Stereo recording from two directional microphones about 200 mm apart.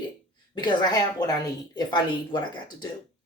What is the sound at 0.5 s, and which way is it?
Speech, 20° left (ahead or behind).